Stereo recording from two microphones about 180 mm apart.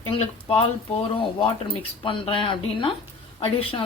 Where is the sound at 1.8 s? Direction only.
30° left (ahead or behind).